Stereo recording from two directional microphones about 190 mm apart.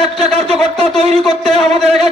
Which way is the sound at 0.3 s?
35° right (ahead or behind).